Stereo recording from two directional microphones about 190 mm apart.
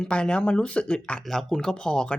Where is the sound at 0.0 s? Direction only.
5° left (ahead or behind).